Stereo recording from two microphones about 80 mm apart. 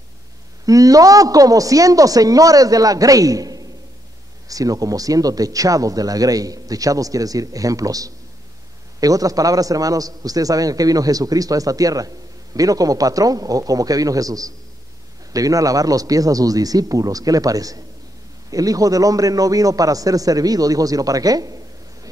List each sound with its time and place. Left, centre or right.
0.7 s speech: right